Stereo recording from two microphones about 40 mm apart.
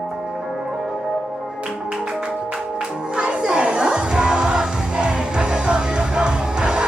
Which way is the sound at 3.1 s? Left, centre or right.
Right.